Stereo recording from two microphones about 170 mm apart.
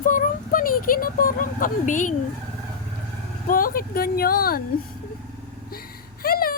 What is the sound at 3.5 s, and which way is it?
Speech, 55° left (ahead or behind).